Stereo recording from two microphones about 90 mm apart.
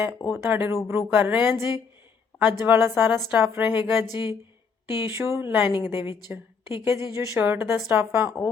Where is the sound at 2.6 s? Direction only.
25° right (ahead or behind).